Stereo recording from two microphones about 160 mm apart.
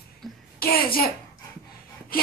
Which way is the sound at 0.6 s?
70° left (ahead or behind).